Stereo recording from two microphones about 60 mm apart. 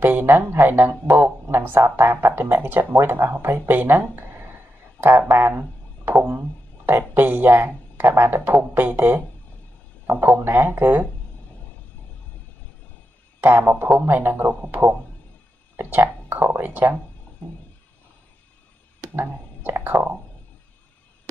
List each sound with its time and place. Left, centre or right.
0.0 s speech: right
5.6 s a sound: right
6.9 s speech: right
13.4 s speech: right
15.7 s a sound: right
16.4 s speech: right
18.9 s speech: right